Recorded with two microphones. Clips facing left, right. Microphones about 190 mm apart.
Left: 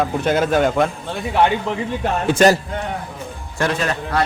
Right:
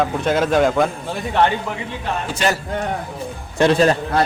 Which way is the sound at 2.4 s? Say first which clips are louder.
Left 7 dB; 45° left (ahead or behind).